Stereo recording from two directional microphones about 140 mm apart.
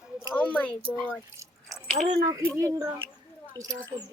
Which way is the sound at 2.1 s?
20° right (ahead or behind).